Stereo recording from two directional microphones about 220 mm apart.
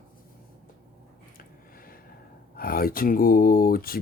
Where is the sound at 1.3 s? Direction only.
40° left (ahead or behind).